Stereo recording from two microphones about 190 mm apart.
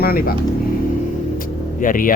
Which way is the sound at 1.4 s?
45° left (ahead or behind).